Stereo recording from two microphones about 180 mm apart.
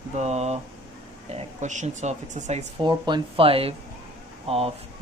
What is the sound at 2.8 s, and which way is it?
Speech, 25° right (ahead or behind).